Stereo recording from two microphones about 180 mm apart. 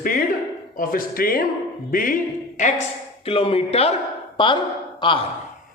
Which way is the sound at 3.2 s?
30° left (ahead or behind).